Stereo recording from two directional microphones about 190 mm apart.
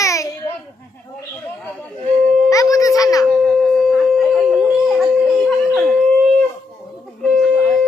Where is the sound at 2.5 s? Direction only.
15° left (ahead or behind).